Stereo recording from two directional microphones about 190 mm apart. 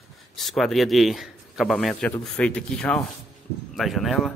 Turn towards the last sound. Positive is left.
turn(degrees=0)  # may be behind; listen again after turning